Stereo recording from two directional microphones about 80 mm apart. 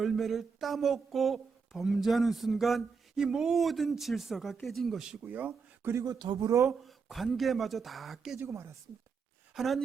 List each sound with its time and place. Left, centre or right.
0.0 s speech: centre
5.2 s speech: right
6.1 s a man's voice: right
6.4 s speech: right
6.7 s speech: centre
8.4 s speech: right
9.6 s speech: centre